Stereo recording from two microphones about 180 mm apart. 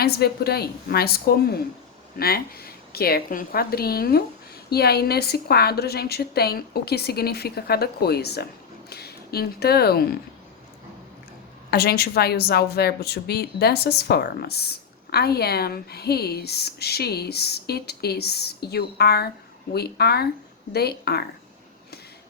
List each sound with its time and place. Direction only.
0.0 s speech: 60° left (ahead or behind)
11.7 s speech: 60° left (ahead or behind)